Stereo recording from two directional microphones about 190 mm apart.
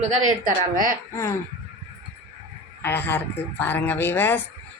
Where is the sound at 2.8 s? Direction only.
10° left (ahead or behind).